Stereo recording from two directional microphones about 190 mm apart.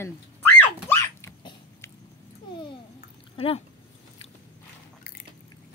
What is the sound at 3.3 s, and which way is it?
Dog, 30° left (ahead or behind).